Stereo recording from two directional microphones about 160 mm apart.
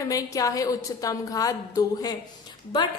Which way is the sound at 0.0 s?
20° left (ahead or behind).